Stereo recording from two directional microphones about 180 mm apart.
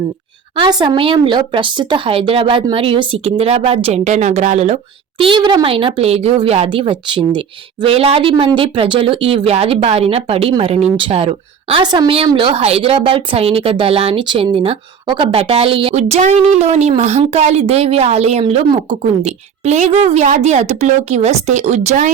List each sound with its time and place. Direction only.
0.5 s speech: 25° right (ahead or behind); by 22.1 s 40° right (ahead or behind)